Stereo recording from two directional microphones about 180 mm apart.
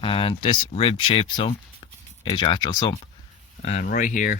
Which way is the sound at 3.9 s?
50° left (ahead or behind).